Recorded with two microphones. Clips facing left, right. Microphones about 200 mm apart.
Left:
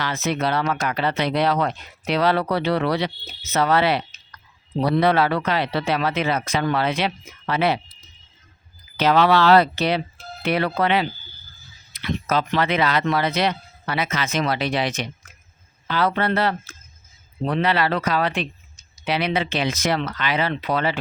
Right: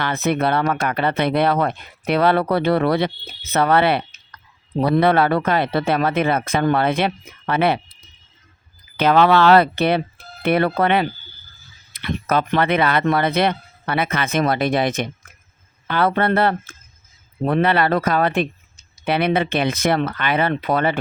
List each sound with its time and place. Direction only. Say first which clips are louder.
0.0 s speech: right 4 dB; 55° right (ahead or behind)
9.0 s speech: right 3 dB; 55° right (ahead or behind)